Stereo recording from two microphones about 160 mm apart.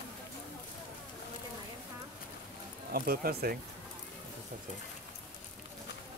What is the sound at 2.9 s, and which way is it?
Speech, 75° right (ahead or behind).